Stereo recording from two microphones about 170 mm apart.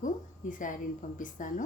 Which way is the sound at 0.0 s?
50° left (ahead or behind).